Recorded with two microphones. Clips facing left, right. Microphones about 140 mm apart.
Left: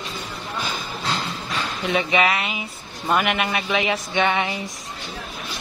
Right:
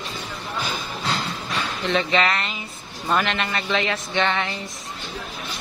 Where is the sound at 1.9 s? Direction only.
15° left (ahead or behind).